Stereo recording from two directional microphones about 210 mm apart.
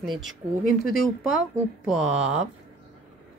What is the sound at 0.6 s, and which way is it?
Speech, 45° left (ahead or behind).